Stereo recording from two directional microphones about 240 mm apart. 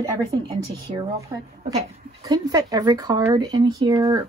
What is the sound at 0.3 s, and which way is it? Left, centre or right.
Speech, centre.